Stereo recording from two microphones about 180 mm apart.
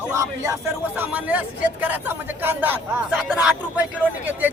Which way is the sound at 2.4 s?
10° right (ahead or behind).